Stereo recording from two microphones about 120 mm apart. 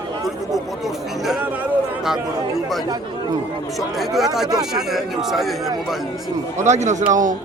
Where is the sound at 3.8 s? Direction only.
Centre (ahead or behind).